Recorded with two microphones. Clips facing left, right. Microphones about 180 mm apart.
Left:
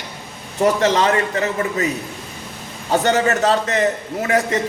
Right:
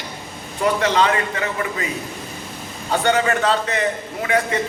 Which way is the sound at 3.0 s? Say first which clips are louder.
Left 1 dB; 40° left (ahead or behind).